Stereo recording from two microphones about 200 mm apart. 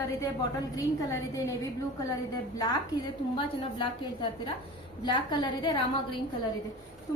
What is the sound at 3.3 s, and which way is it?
A woman's voice, 25° left (ahead or behind).